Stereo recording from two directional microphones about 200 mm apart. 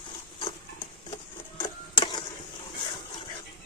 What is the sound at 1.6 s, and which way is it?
Printer, 25° left (ahead or behind).